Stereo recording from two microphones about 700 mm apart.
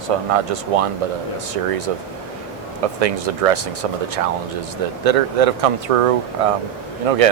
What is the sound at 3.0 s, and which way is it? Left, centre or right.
Speech, right.